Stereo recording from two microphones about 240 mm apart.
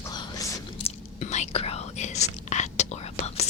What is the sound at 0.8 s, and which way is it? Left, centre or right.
Whispering, left.